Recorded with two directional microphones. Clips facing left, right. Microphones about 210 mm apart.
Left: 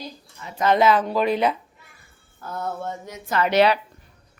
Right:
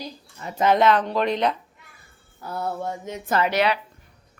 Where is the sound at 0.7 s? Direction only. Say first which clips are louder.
Left 1 dB; 5° left (ahead or behind).